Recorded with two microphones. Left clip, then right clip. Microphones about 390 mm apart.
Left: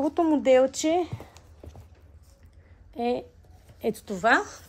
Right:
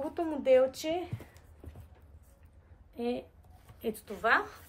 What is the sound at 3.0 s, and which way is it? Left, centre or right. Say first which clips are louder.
A woman's voice: left 7 dB; centre.